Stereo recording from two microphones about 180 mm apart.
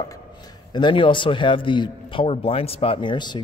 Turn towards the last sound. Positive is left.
turn(degrees=25)  # may be behind; listen again after turning